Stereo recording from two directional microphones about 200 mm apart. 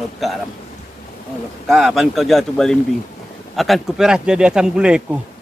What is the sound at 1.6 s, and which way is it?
A man's voice, centre (ahead or behind).